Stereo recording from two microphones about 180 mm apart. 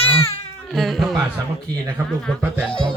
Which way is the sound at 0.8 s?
Centre (ahead or behind).